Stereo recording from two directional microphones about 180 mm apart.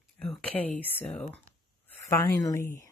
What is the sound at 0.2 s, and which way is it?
Speech, 5° left (ahead or behind).